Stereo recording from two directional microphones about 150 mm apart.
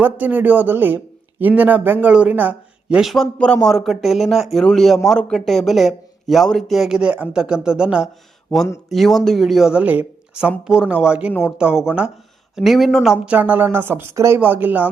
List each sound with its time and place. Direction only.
0.0 s a man's voice: 10° right (ahead or behind)